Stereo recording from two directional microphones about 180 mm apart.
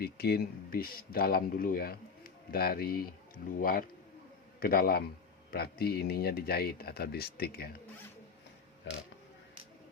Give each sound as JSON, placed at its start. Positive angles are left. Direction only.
{"t": 0.0, "sound": "speech", "side_deg": 60}
{"t": 8.9, "sound": "speech", "side_deg": 75}